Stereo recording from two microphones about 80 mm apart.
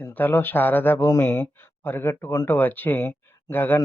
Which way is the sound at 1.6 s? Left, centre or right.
Left.